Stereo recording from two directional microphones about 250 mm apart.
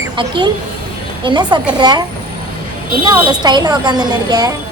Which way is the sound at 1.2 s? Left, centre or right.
Centre.